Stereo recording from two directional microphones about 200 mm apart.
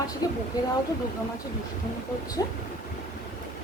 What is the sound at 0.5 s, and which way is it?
Speech, 20° left (ahead or behind).